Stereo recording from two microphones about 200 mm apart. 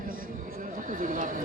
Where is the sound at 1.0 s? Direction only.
40° right (ahead or behind).